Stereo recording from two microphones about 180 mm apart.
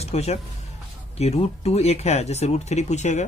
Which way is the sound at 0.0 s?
35° left (ahead or behind).